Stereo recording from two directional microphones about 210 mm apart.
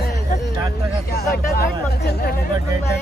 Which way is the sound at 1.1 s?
45° left (ahead or behind).